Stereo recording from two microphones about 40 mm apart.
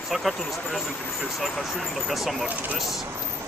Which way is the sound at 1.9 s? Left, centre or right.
Centre.